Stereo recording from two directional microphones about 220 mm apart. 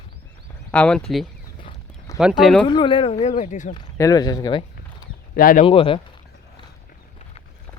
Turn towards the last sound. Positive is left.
turn(degrees=25)  # may be behind; listen again after turning